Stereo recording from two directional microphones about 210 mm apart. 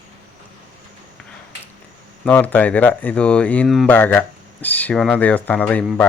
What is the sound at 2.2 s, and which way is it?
Speech, 5° left (ahead or behind).